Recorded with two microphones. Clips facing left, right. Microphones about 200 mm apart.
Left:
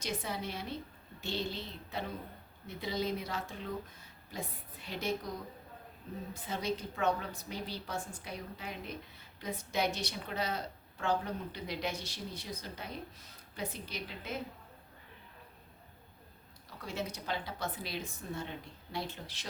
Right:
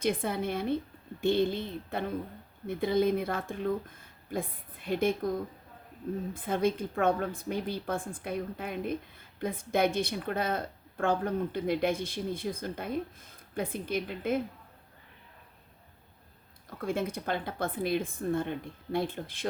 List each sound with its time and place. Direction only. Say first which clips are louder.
0.0 s speech: right 8 dB; 55° right (ahead or behind)
16.6 s speech: right 8 dB; 50° right (ahead or behind)